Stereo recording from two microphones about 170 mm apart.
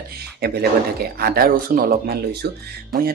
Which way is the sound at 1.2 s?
60° right (ahead or behind).